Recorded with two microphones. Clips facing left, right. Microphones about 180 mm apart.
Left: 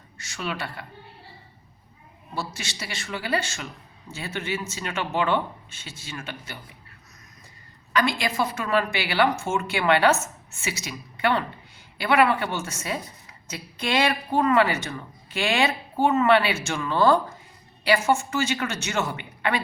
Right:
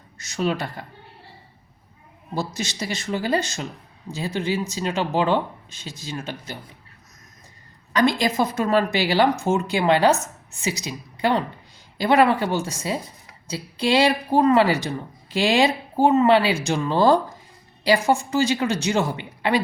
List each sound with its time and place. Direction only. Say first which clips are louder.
0.2 s speech: right 7 dB; 40° right (ahead or behind)
2.6 s speech: right 7 dB; 40° right (ahead or behind)
8.5 s speech: right 5 dB; 40° right (ahead or behind)